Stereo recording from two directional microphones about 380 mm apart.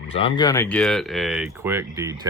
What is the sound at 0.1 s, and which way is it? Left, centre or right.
Speech, centre.